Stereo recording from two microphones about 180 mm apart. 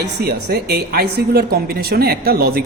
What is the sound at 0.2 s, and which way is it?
A woman's voice, 65° right (ahead or behind).